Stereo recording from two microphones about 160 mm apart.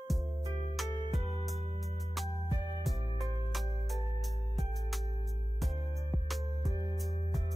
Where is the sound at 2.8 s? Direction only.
Centre (ahead or behind).